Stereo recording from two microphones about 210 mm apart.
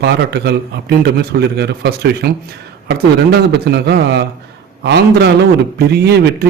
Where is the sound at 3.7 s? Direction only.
50° right (ahead or behind).